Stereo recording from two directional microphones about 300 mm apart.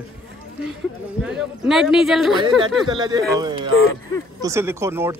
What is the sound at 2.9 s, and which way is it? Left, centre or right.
Speech, centre.